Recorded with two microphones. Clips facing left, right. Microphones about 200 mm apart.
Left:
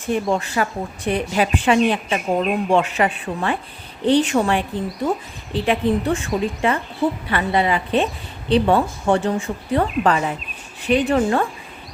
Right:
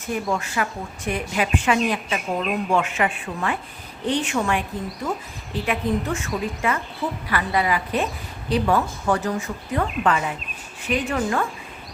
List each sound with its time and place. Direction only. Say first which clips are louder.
0.0 s a woman's voice: left 5 dB; 30° left (ahead or behind)